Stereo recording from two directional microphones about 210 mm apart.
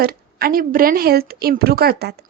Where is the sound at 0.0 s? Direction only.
45° right (ahead or behind).